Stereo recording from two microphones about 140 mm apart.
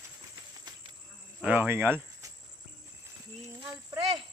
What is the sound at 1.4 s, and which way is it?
Speech, 10° right (ahead or behind).